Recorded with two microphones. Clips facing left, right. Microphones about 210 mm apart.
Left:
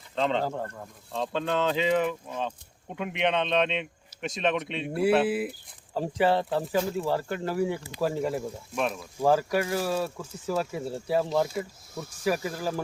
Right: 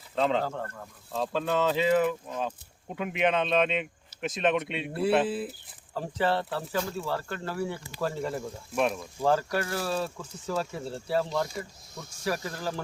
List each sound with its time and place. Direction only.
0.2 s speech: 5° right (ahead or behind)
0.5 s speech: 15° left (ahead or behind)
1.1 s speech: 5° right (ahead or behind)
5.2 s speech: 10° left (ahead or behind)
8.7 s speech: centre (ahead or behind); by 11.3 s 15° left (ahead or behind)
11.4 s speech: 5° left (ahead or behind)